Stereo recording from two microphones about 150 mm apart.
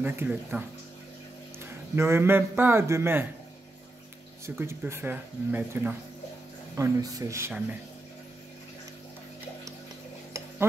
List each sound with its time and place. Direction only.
0.0 s speech: 15° right (ahead or behind)
2.0 s speech: 15° right (ahead or behind)
4.6 s speech: 15° right (ahead or behind)
6.8 s speech: 25° right (ahead or behind)